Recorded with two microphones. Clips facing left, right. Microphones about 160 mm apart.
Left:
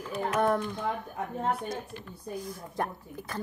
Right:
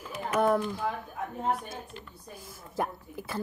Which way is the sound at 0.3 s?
5° right (ahead or behind).